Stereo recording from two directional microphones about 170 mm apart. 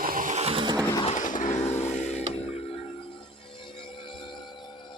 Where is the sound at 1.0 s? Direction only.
45° left (ahead or behind).